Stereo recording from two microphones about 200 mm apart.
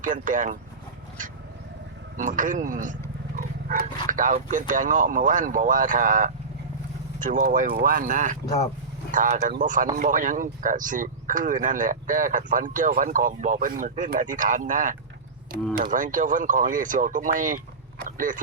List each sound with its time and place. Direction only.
0.0 s speech: 40° right (ahead or behind)
2.1 s speech: 40° right (ahead or behind)
18.0 s a sound: 40° right (ahead or behind)